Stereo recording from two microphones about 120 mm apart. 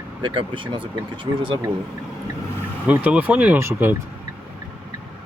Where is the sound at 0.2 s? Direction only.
45° right (ahead or behind).